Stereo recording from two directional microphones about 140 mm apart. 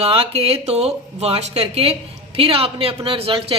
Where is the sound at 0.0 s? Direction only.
45° right (ahead or behind).